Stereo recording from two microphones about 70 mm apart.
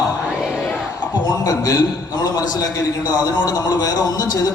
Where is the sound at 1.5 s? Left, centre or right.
Left.